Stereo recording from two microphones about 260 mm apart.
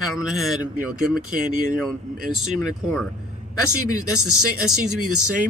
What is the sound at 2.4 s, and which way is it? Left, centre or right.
Speech, centre.